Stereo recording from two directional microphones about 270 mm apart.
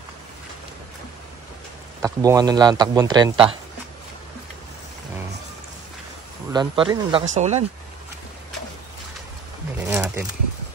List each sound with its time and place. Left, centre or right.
2.0 s a man's voice: centre
6.5 s speech: centre
9.8 s a sound: centre